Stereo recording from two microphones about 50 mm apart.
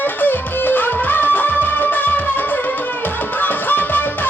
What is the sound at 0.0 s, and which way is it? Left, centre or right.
Music, left.